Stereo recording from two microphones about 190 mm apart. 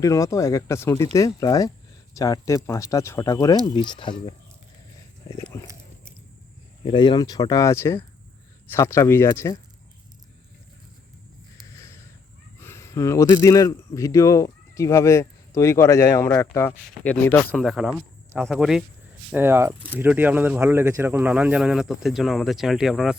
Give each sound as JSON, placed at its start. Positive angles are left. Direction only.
{"t": 0.0, "sound": "speech", "side_deg": 15}
{"t": 5.3, "sound": "a sound", "side_deg": 15}
{"t": 6.8, "sound": "speech", "side_deg": 25}
{"t": 12.5, "sound": "speech", "side_deg": 15}
{"t": 17.5, "sound": "speech", "side_deg": 0}
{"t": 19.3, "sound": "speech", "side_deg": -10}